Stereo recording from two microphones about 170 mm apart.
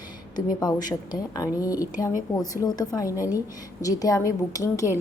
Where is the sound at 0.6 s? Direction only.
25° left (ahead or behind).